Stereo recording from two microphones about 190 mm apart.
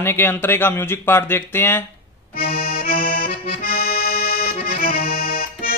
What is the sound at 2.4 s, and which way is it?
Accordion, 50° left (ahead or behind).